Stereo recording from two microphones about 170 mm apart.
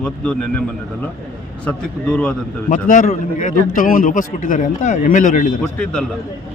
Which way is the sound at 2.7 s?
50° left (ahead or behind).